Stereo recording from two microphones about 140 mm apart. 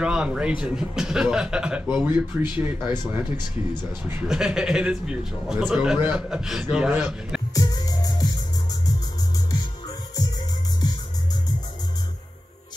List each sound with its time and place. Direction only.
0.0 s a man's voice: 5° right (ahead or behind)
4.3 s a man's voice: 5° right (ahead or behind)
7.5 s music: 25° left (ahead or behind)
9.5 s music: 25° left (ahead or behind)